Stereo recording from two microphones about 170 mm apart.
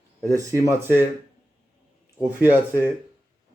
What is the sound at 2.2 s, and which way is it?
Speech, 10° right (ahead or behind).